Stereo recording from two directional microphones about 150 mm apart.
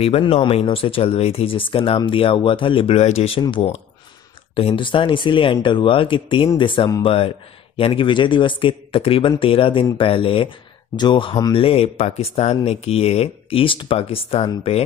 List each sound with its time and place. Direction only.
0.0 s speech: 40° left (ahead or behind)